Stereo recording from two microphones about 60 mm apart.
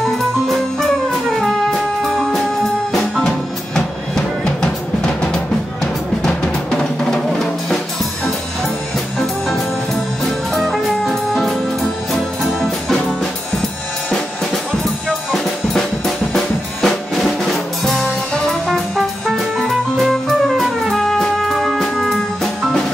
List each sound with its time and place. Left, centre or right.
0.5 s music: centre
3.7 s drum: centre
10.5 s music: centre
16.3 s music: centre